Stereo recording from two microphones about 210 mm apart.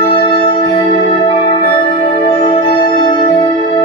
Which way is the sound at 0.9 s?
45° left (ahead or behind).